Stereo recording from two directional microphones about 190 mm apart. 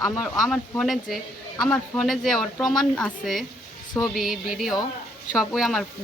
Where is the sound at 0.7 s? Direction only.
Centre (ahead or behind).